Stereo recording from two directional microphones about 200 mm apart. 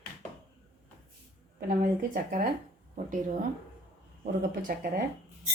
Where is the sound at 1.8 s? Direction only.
45° right (ahead or behind).